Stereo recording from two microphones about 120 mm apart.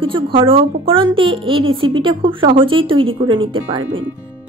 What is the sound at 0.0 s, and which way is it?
A woman's voice, 45° right (ahead or behind).